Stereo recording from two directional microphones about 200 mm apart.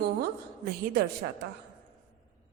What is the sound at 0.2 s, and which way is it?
Speech, 50° right (ahead or behind).